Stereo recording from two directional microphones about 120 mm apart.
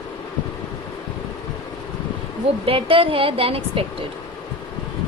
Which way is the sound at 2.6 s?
50° right (ahead or behind).